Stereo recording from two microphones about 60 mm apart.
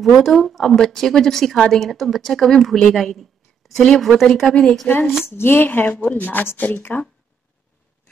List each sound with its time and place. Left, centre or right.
0.0 s a woman's voice: centre
5.2 s speech: left